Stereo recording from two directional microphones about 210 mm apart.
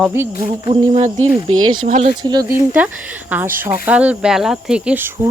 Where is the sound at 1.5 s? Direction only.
90° right.